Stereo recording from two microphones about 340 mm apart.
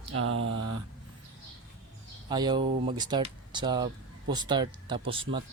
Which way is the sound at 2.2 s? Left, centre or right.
Centre.